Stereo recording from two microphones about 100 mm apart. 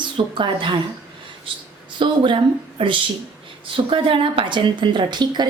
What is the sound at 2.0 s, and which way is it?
A woman's voice, 55° right (ahead or behind).